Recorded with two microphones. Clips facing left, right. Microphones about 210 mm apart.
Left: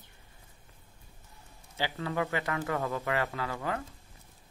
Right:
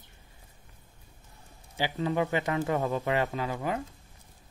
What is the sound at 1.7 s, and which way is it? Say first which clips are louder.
A man's voice: right 4 dB; 15° right (ahead or behind).